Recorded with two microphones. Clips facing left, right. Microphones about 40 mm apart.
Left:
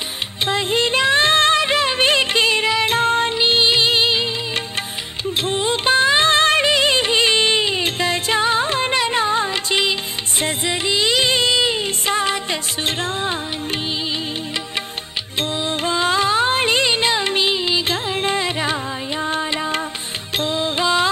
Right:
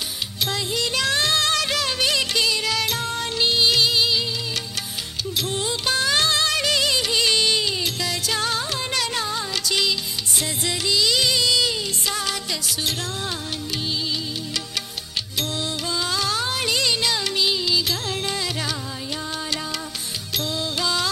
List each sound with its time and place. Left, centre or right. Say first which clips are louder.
0.5 s music: left 8 dB; left
5.4 s music: left 6 dB; left
15.6 s music: left 7 dB; left